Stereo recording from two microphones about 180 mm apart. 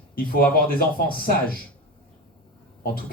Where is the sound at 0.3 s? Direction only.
55° left (ahead or behind).